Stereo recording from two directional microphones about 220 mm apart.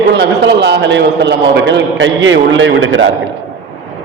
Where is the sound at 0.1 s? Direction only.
50° right (ahead or behind).